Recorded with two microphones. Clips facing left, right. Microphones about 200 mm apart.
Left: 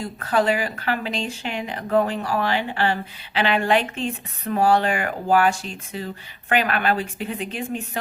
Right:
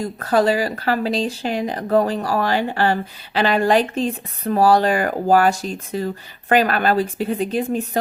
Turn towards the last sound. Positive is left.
turn(degrees=-40)  # may be behind; listen again after turning